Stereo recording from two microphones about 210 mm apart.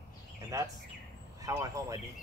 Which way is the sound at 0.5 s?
15° right (ahead or behind).